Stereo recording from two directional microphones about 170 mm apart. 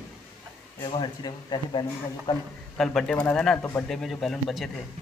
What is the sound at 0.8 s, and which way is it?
Speech, 25° left (ahead or behind).